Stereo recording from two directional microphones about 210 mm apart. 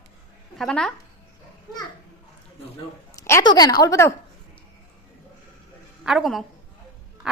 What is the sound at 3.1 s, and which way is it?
Speech, 15° left (ahead or behind).